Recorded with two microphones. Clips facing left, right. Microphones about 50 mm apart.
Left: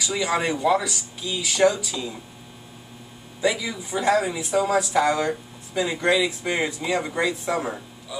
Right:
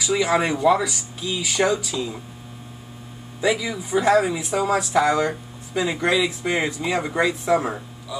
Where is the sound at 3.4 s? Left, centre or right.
Centre.